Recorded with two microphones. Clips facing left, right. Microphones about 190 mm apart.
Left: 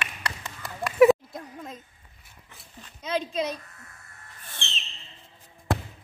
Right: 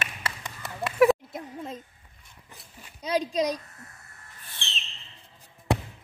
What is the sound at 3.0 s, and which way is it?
Speech, 35° right (ahead or behind).